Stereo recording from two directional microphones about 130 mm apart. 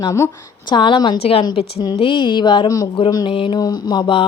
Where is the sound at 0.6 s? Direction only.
40° left (ahead or behind).